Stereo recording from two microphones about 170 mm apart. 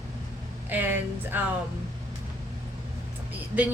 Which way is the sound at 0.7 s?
10° right (ahead or behind).